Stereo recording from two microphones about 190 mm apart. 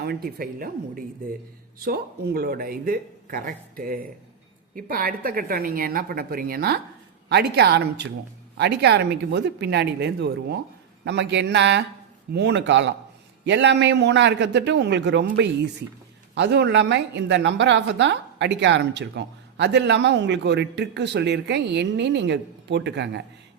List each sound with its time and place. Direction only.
0.0 s a woman's voice: 55° right (ahead or behind)